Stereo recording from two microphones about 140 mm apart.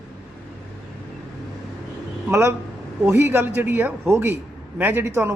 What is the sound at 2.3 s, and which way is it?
Speech, 15° right (ahead or behind).